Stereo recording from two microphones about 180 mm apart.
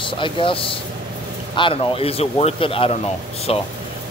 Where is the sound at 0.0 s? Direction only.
30° left (ahead or behind).